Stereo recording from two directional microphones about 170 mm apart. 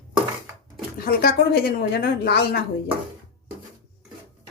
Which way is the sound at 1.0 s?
60° left (ahead or behind).